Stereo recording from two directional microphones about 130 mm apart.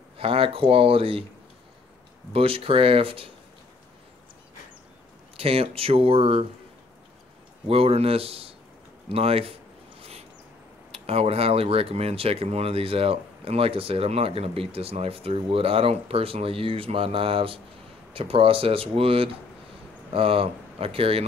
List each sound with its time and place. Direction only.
0.2 s speech: 45° right (ahead or behind)
2.3 s speech: 45° right (ahead or behind)
5.4 s speech: 45° right (ahead or behind)
7.6 s speech: 50° right (ahead or behind)
10.9 s speech: 50° right (ahead or behind)